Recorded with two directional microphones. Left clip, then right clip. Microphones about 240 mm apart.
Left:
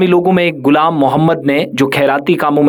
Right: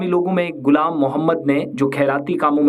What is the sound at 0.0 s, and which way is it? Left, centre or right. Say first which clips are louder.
Speech: left 8 dB; left.